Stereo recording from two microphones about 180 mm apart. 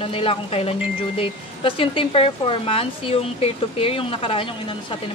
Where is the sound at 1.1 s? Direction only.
30° left (ahead or behind).